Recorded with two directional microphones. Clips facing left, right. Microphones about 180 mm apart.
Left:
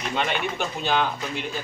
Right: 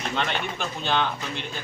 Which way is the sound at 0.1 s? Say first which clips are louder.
Left 4 dB; 10° left (ahead or behind).